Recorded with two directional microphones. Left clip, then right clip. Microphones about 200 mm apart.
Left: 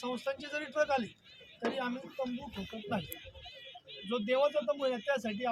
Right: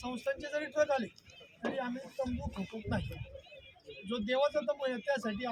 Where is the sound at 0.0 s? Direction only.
Centre (ahead or behind).